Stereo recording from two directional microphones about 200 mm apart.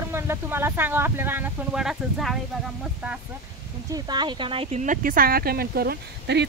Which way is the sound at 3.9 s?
20° right (ahead or behind).